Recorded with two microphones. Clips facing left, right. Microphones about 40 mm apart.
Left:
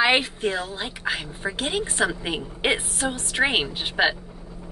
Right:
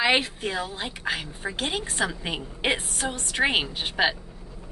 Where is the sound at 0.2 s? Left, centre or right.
Centre.